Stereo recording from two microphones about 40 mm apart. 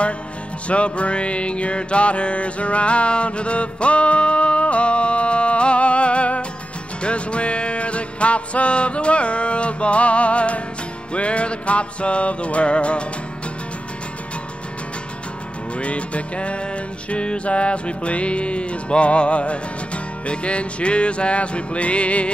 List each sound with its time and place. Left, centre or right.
0.7 s music: left
15.8 s music: left